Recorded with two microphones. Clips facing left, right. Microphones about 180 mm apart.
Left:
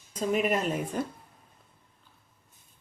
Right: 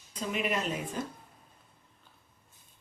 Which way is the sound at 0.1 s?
45° left (ahead or behind).